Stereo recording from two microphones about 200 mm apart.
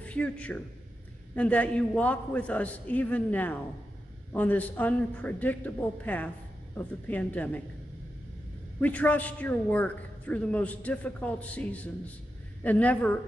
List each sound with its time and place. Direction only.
0.0 s a woman's voice: 5° left (ahead or behind)
8.8 s a man's voice: 10° left (ahead or behind)